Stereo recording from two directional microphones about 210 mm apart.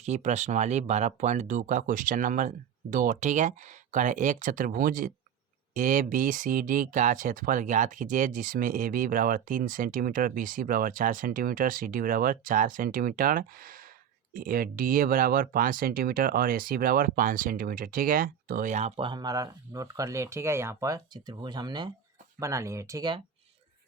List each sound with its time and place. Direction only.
0.0 s speech: 35° right (ahead or behind)